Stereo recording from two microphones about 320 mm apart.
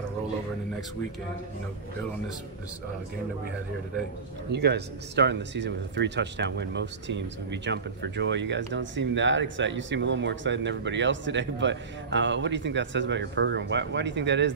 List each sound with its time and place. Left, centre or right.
4.5 s speech: right